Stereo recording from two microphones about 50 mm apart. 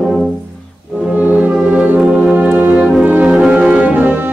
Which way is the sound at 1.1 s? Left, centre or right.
Right.